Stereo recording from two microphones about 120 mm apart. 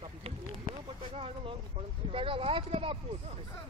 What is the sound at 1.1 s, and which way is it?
Vehicle, 50° right (ahead or behind).